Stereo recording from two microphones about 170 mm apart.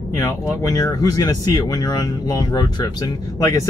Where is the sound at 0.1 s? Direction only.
20° left (ahead or behind).